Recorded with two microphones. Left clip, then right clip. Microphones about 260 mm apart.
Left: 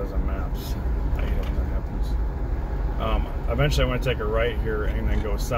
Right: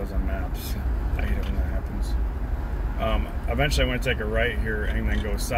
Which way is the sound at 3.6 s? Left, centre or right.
Right.